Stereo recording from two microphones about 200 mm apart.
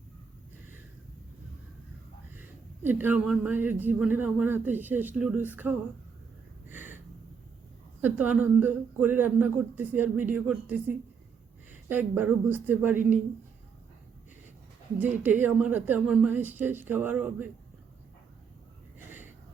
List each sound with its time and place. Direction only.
2.4 s speech: 10° right (ahead or behind)
6.7 s a sound: 10° right (ahead or behind)
8.0 s speech: 10° right (ahead or behind)
14.9 s speech: 10° right (ahead or behind)